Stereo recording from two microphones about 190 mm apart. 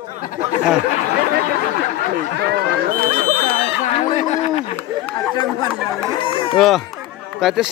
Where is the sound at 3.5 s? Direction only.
40° left (ahead or behind).